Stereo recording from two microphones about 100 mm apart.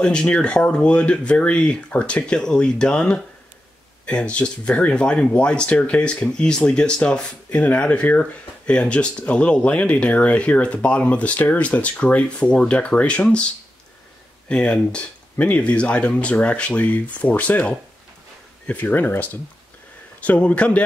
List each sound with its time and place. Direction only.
0.0 s speech: 10° left (ahead or behind)
14.5 s speech: 10° left (ahead or behind)